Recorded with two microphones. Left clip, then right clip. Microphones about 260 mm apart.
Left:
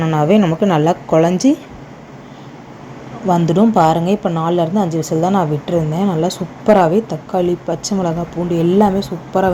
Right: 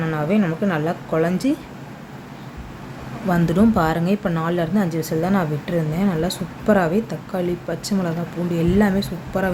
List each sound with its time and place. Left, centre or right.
0.0 s a woman's voice: centre
3.3 s a woman's voice: centre